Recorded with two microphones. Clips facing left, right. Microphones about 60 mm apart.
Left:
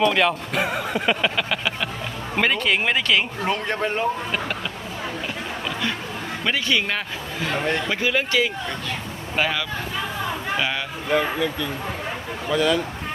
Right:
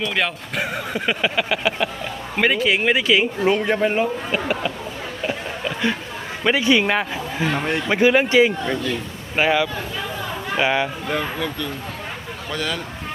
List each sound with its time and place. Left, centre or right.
0.1 s speech: centre
5.6 s chatter: centre
6.4 s speech: centre
7.5 s speech: centre
7.9 s speech: right
11.1 s speech: centre